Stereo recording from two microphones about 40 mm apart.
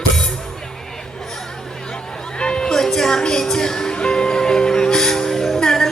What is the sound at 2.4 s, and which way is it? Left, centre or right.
Music, centre.